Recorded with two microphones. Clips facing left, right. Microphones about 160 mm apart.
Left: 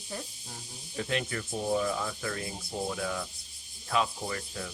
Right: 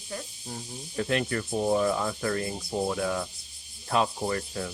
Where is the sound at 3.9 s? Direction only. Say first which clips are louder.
Right 4 dB; 45° right (ahead or behind).